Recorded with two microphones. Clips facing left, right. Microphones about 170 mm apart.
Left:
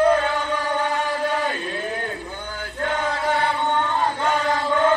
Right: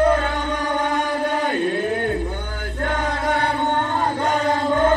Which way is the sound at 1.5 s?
50° right (ahead or behind).